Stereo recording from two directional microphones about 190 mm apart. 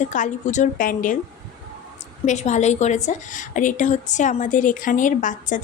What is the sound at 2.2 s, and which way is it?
A woman's voice, 40° left (ahead or behind).